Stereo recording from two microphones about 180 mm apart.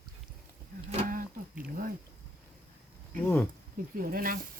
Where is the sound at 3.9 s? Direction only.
55° right (ahead or behind).